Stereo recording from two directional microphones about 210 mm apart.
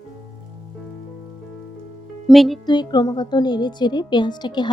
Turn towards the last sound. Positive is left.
turn(degrees=20)  # may be behind; listen again after turning